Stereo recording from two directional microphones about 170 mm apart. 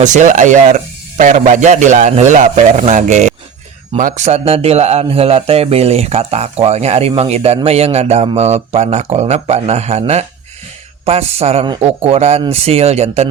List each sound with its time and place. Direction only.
0.0 s speech: 45° right (ahead or behind)